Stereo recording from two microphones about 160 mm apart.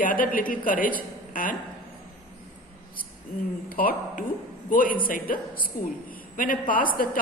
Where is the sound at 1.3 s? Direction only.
60° left (ahead or behind).